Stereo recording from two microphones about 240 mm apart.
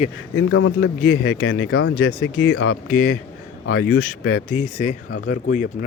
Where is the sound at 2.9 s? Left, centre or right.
Left.